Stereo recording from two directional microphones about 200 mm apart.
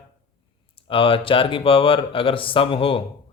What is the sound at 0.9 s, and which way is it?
Speech, 25° left (ahead or behind).